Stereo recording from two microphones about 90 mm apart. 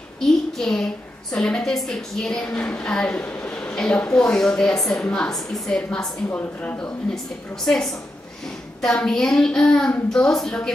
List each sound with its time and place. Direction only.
0.2 s a child's voice: 5° left (ahead or behind)
7.6 s a woman's voice: 5° left (ahead or behind)